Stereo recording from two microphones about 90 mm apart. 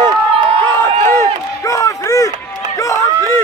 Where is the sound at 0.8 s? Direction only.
35° left (ahead or behind).